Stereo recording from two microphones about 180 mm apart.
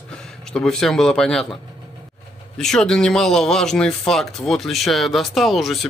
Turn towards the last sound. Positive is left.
turn(degrees=0)  # may be behind; listen again after turning